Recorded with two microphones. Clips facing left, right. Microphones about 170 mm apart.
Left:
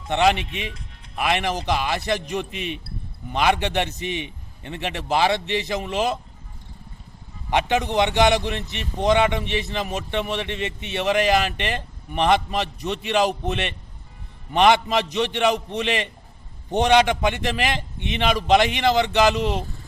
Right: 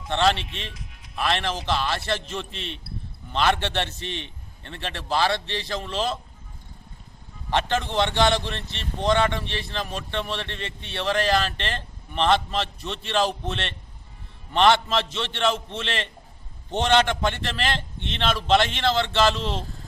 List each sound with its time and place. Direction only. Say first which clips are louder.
0.1 s speech: left 3 dB; 15° left (ahead or behind)
7.5 s speech: left 3 dB; 15° left (ahead or behind)